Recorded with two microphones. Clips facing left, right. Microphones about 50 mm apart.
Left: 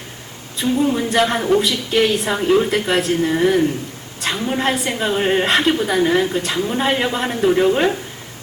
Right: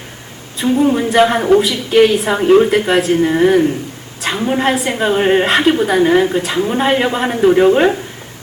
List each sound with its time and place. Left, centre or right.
0.6 s speech: centre
1.9 s speech: centre
2.4 s speech: centre
5.5 s speech: centre
5.7 s speech: centre